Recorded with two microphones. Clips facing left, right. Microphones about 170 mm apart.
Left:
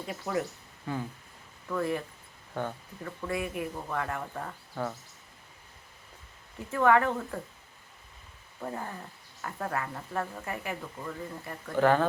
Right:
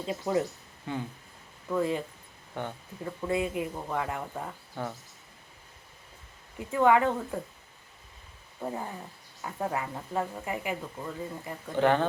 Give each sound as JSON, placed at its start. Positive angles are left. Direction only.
{"t": 0.0, "sound": "speech", "side_deg": -25}
{"t": 1.7, "sound": "speech", "side_deg": -20}
{"t": 6.6, "sound": "speech", "side_deg": -15}
{"t": 8.6, "sound": "speech", "side_deg": -15}